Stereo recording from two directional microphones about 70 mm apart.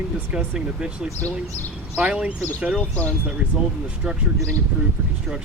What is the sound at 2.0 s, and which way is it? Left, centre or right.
Speech, centre.